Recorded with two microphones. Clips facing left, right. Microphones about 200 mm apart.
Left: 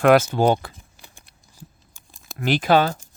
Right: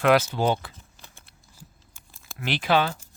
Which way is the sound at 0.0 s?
50° left (ahead or behind).